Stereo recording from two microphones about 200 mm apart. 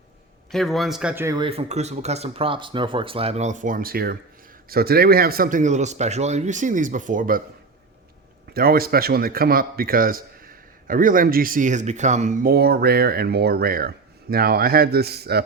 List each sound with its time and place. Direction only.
0.5 s speech: centre (ahead or behind)
1.4 s speech: 30° right (ahead or behind)
8.5 s a man's voice: 50° right (ahead or behind)